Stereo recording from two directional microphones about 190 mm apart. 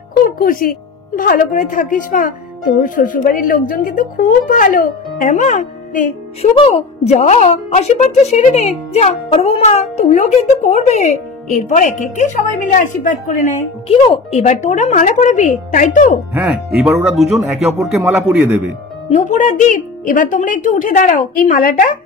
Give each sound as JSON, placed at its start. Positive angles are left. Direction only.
{"t": 0.2, "sound": "a woman's voice", "side_deg": 50}
{"t": 14.0, "sound": "speech", "side_deg": 30}
{"t": 16.3, "sound": "speech", "side_deg": -5}
{"t": 19.0, "sound": "a woman's voice", "side_deg": 40}